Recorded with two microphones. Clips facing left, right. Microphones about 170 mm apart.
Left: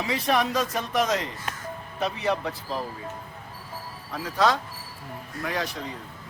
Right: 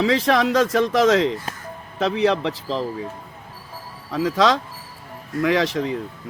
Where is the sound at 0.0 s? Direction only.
90° right.